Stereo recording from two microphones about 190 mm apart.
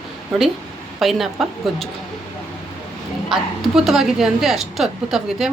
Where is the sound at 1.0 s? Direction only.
Centre (ahead or behind).